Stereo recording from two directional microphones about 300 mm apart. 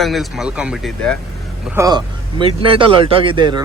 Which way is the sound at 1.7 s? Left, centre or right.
Centre.